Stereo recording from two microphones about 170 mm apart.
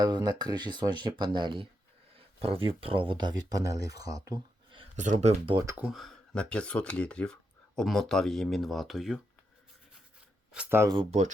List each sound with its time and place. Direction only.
0.0 s speech: 25° right (ahead or behind)
4.9 s speech: 45° right (ahead or behind)
5.6 s speech: 10° right (ahead or behind)
10.5 s speech: 10° right (ahead or behind)
10.9 s speech: 40° right (ahead or behind)